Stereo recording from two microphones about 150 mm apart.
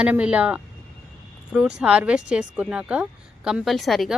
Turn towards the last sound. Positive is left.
turn(degrees=0)  # may be behind; listen again after turning